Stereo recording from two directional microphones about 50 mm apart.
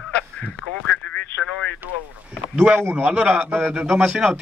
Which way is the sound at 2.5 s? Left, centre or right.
Right.